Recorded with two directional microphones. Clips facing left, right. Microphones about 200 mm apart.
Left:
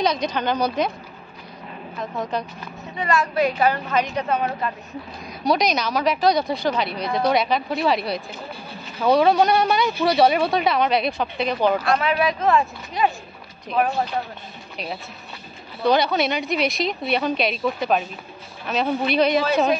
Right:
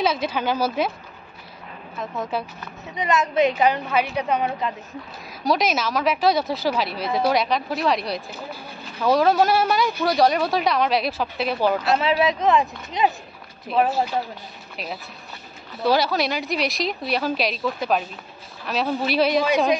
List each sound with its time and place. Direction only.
0.0 s a woman's voice: 5° right (ahead or behind)
2.0 s a woman's voice: centre (ahead or behind)
2.9 s a woman's voice: 20° right (ahead or behind)
5.4 s a woman's voice: centre (ahead or behind)
11.8 s speech: 25° right (ahead or behind)
13.8 s a woman's voice: 5° right (ahead or behind)
15.8 s a woman's voice: 5° right (ahead or behind)